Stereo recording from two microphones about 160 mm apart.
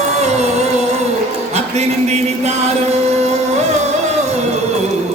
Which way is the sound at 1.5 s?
45° right (ahead or behind).